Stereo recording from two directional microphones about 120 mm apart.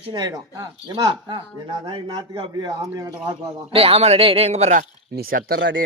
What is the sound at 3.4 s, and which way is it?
Speech, 50° right (ahead or behind).